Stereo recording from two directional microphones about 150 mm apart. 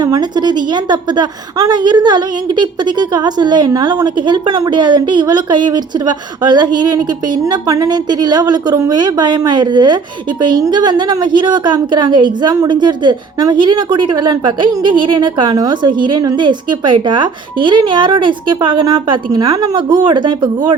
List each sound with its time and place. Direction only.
0.0 s a woman's voice: 25° right (ahead or behind)